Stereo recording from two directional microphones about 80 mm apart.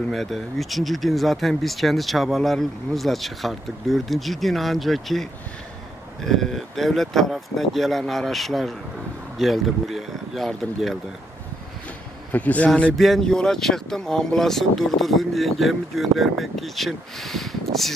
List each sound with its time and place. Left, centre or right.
0.1 s speech: centre
12.3 s speech: centre
12.9 s speech: centre